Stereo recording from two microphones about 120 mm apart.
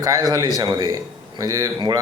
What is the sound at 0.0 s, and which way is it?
A man's voice, 30° right (ahead or behind).